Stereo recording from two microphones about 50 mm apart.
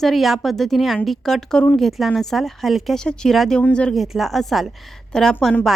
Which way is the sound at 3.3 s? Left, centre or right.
Centre.